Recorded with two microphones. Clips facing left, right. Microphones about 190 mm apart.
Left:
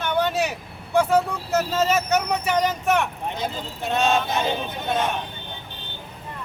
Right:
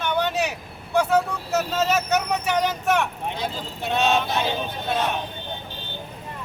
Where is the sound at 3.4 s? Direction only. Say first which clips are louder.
Left 2 dB; centre (ahead or behind).